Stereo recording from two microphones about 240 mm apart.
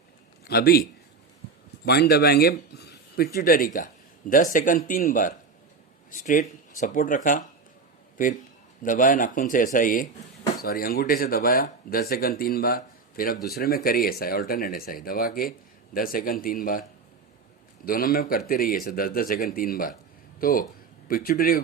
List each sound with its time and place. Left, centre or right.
0.5 s speech: left
8.8 s speech: left
17.8 s speech: left